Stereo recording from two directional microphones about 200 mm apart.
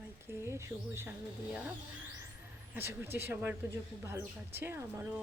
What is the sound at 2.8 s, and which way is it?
Speech, 10° right (ahead or behind).